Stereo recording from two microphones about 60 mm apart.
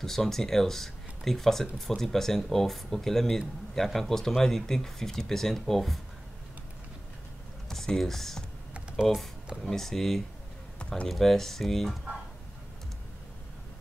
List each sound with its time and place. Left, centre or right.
0.0 s speech: centre
7.7 s speech: centre
10.8 s a sound: centre
11.1 s speech: centre